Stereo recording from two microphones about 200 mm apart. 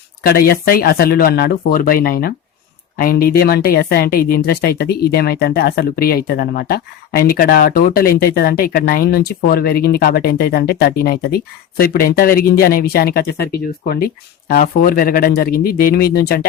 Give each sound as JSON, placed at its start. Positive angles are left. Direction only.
{"t": 0.2, "sound": "speech", "side_deg": 50}